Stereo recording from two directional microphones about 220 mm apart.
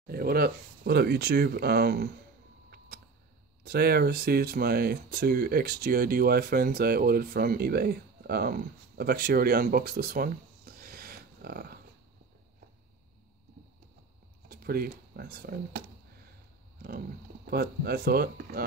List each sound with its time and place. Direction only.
0.0 s speech: 45° right (ahead or behind)
3.6 s speech: 45° right (ahead or behind)
14.5 s speech: 45° right (ahead or behind)
17.5 s speech: 45° right (ahead or behind)